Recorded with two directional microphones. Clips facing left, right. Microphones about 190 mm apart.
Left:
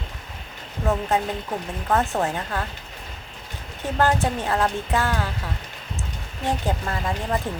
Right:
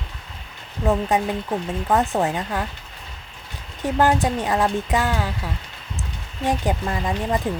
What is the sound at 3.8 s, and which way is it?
Speech, 15° right (ahead or behind).